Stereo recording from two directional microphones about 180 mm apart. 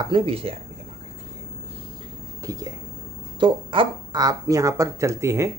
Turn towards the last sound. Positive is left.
turn(degrees=-15)  # may be behind; listen again after turning